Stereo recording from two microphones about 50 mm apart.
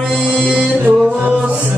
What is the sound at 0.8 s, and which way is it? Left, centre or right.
Music, right.